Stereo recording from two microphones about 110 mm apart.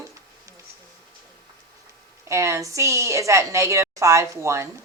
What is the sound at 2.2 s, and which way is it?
Speech, 25° right (ahead or behind).